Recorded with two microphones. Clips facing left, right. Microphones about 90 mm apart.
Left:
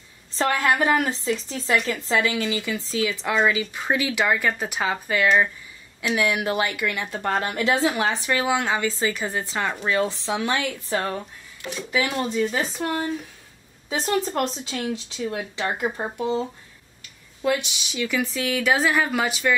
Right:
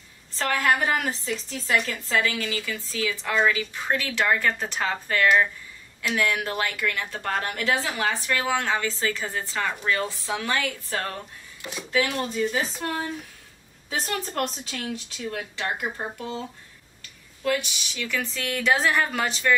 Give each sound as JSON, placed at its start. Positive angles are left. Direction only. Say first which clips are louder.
{"t": 0.4, "sound": "speech", "louder": "left 2 dB", "side_deg": 20}
{"t": 14.3, "sound": "speech", "louder": "left 3 dB", "side_deg": 15}
{"t": 17.4, "sound": "speech", "louder": "left 2 dB", "side_deg": 20}